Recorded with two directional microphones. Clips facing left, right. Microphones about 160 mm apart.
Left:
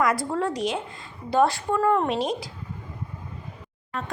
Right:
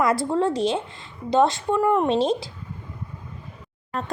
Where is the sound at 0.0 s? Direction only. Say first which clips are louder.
Right 3 dB; 25° right (ahead or behind).